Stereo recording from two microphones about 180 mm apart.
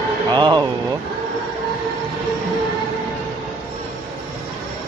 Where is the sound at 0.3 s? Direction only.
25° right (ahead or behind).